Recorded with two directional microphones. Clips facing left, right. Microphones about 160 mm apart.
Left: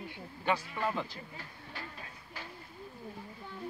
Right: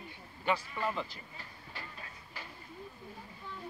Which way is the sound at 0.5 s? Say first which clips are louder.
Left 1 dB; centre (ahead or behind).